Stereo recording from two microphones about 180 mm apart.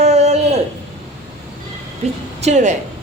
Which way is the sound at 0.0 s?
35° right (ahead or behind).